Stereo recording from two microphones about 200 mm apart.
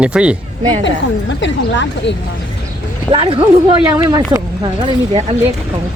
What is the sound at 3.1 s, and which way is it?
Speech, 25° right (ahead or behind).